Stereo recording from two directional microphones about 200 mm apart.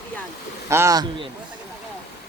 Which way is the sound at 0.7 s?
15° right (ahead or behind).